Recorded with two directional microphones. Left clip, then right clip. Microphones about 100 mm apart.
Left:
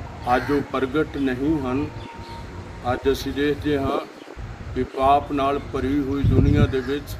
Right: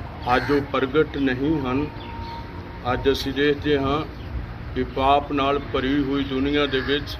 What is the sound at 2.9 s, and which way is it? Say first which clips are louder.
Speech: even; 60° left (ahead or behind).